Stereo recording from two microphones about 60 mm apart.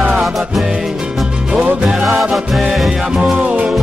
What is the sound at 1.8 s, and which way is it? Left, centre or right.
Music, centre.